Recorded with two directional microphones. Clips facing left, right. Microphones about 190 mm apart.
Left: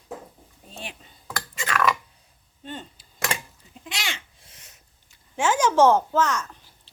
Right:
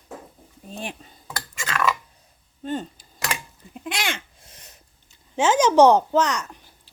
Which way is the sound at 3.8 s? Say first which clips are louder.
Right 6 dB; 55° right (ahead or behind).